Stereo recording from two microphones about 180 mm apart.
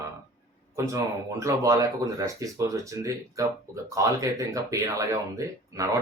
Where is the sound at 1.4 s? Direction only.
20° right (ahead or behind).